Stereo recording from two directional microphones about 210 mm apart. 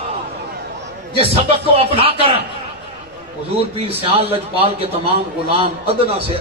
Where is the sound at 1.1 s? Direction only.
25° right (ahead or behind).